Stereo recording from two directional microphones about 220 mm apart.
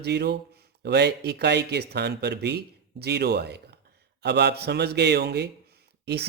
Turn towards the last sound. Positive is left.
turn(degrees=-50)  # may be behind; listen again after turning